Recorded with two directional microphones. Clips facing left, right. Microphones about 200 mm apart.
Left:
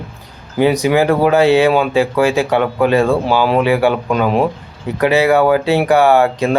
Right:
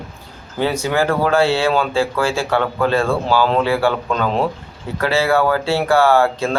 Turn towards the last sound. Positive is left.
turn(degrees=15)  # may be behind; listen again after turning